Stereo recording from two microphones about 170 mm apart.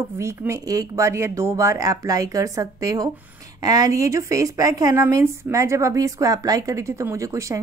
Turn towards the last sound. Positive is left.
turn(degrees=-20)  # may be behind; listen again after turning